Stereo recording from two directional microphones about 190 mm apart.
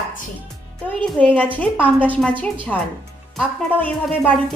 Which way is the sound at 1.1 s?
10° left (ahead or behind).